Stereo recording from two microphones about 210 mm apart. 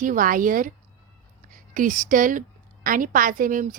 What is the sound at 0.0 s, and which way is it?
A woman's voice, 40° right (ahead or behind).